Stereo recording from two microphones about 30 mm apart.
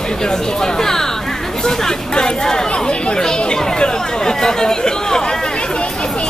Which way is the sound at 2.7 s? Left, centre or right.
Left.